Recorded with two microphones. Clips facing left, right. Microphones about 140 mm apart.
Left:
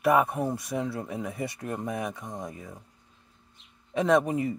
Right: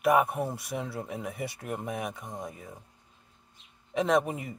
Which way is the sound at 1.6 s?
20° right (ahead or behind).